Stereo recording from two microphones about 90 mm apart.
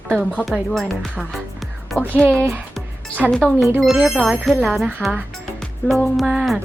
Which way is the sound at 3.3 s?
5° left (ahead or behind).